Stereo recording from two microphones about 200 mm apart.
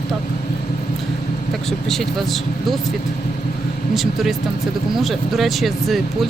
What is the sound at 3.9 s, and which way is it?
Speech, centre (ahead or behind).